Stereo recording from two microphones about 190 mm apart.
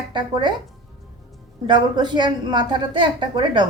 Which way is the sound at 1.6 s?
25° right (ahead or behind).